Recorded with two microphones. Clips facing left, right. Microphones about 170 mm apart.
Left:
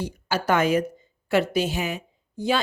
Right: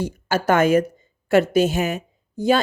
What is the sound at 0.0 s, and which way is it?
A woman's voice, 45° right (ahead or behind).